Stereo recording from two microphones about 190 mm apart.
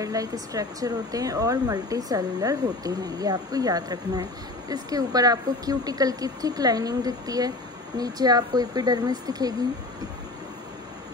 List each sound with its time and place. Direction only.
0.0 s speech: 20° right (ahead or behind)